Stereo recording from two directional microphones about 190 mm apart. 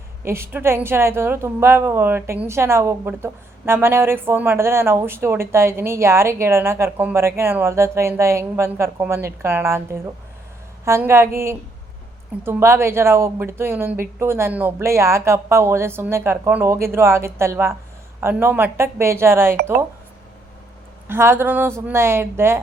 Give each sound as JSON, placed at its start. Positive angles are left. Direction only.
{"t": 0.3, "sound": "a woman's voice", "side_deg": -15}
{"t": 12.4, "sound": "a woman's voice", "side_deg": -15}
{"t": 21.1, "sound": "a woman's voice", "side_deg": -10}